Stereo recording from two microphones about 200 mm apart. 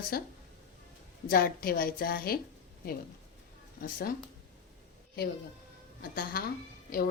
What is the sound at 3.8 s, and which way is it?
Speech, 45° left (ahead or behind).